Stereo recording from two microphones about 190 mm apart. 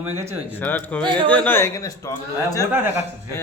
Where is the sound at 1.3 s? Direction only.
10° left (ahead or behind).